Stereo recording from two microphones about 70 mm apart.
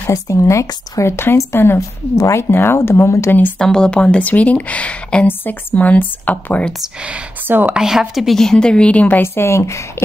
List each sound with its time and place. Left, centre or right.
0.1 s speech: left
1.8 s speech: left
2.5 s speech: left
3.5 s speech: centre
5.2 s speech: left
7.4 s speech: right
7.7 s speech: centre; by 9.3 s left
9.3 s speech: left